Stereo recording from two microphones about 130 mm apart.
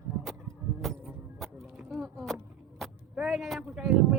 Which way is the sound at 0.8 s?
Centre (ahead or behind).